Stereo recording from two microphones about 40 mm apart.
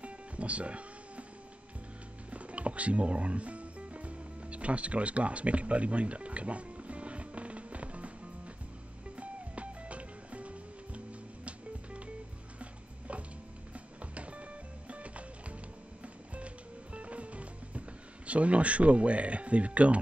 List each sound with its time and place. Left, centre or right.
0.0 s music: right
2.3 s music: right
9.1 s music: right
13.7 s music: right
16.3 s music: right